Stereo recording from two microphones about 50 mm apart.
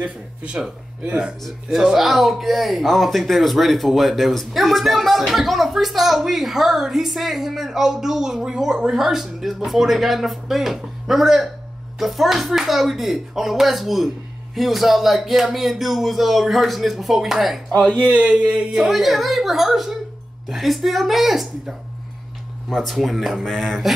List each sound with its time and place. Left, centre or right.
0.6 s speech: centre
17.7 s speech: centre
18.7 s speech: centre
23.4 s a sound: centre